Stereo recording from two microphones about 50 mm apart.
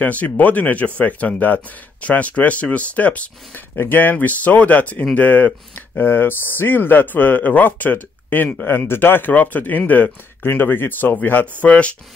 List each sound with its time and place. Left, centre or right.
0.0 s speech: left
5.9 s speech: left
11.6 s speech: left